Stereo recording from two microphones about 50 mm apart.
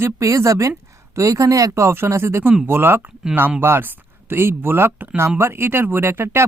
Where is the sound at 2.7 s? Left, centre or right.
Right.